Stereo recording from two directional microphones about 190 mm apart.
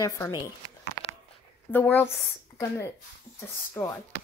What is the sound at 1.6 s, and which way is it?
Speech, 10° left (ahead or behind).